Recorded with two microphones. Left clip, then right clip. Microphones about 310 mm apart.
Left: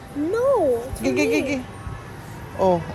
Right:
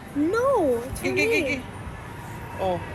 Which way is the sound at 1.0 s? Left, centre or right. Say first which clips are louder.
Left 2 dB; centre.